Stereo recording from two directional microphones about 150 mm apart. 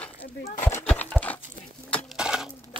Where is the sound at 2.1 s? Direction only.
5° right (ahead or behind).